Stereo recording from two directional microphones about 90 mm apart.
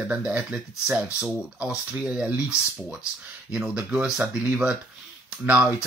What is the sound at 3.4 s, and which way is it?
Speech, 10° right (ahead or behind).